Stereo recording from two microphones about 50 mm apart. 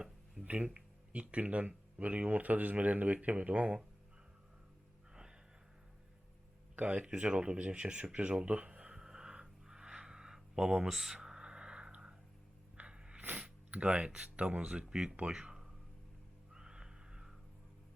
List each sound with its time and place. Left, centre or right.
0.4 s speech: right
6.8 s speech: right
9.0 s a sound: centre
13.3 s speech: right
14.8 s speech: centre
16.5 s a sound: centre